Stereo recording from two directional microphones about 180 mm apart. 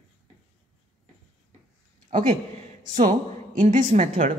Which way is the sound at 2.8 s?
45° right (ahead or behind).